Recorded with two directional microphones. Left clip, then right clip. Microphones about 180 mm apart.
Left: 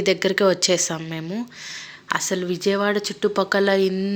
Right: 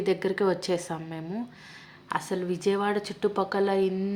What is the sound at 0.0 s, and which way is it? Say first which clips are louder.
Speech: left 7 dB; 10° left (ahead or behind).